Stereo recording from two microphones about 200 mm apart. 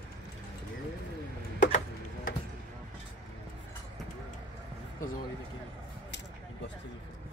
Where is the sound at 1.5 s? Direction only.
40° left (ahead or behind).